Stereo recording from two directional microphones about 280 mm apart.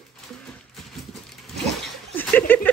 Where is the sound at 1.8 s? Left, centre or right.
Centre.